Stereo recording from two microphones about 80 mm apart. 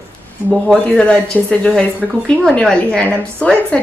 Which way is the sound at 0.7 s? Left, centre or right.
Centre.